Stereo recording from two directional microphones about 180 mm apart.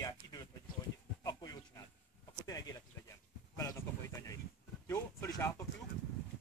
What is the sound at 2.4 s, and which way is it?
Speech, 20° left (ahead or behind).